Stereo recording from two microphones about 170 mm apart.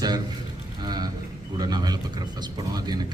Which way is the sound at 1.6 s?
25° right (ahead or behind).